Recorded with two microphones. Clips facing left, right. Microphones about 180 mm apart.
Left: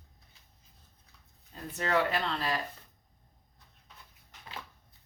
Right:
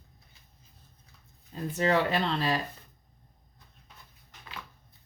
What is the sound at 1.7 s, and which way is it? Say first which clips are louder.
Speech: right 3 dB; 25° right (ahead or behind).